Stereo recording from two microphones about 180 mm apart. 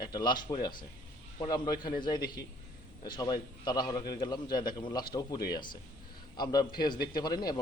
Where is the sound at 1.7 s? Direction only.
55° left (ahead or behind).